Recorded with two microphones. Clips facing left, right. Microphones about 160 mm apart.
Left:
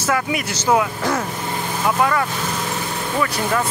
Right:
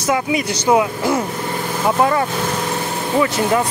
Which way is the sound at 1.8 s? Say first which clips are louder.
Right 3 dB; 30° right (ahead or behind).